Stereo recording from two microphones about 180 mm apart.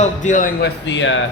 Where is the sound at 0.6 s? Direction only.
85° left.